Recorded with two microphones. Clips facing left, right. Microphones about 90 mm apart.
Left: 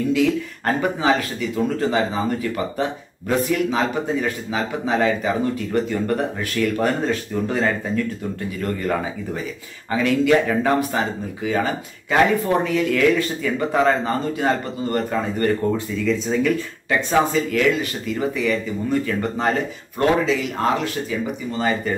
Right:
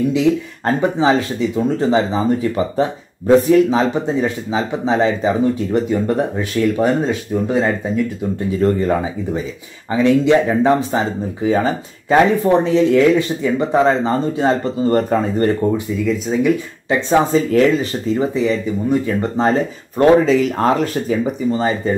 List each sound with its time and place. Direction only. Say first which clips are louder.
0.1 s speech: right 3 dB; 20° right (ahead or behind); by 15.1 s 35° right (ahead or behind)
15.6 s speech: right 3 dB; 15° right (ahead or behind)
17.5 s speech: right 6 dB; 35° right (ahead or behind)
20.2 s speech: right 6 dB; 40° right (ahead or behind)
21.5 s speech: right 4 dB; 25° right (ahead or behind)